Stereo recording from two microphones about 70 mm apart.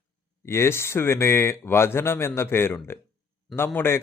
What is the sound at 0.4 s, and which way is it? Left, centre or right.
A man's voice, left.